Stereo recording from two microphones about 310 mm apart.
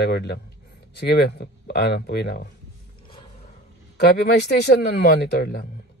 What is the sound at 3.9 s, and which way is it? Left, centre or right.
Speech, left.